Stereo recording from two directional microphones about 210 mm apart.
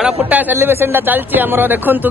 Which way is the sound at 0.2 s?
10° right (ahead or behind).